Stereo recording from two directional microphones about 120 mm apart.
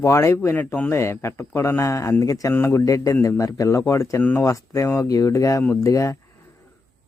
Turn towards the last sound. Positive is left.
turn(degrees=25)  # may be behind; listen again after turning